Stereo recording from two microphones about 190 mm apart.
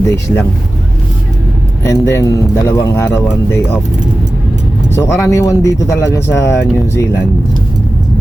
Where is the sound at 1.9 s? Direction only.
15° left (ahead or behind).